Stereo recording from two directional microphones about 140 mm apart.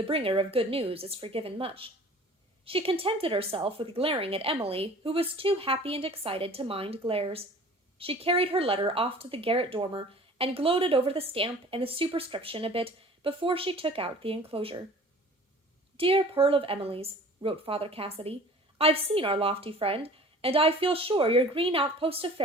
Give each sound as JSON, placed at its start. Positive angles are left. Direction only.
{"t": 0.1, "sound": "speech", "side_deg": -40}
{"t": 16.0, "sound": "speech", "side_deg": -40}